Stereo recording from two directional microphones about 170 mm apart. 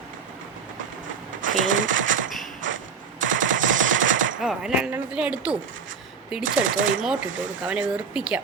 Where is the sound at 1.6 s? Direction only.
90° right.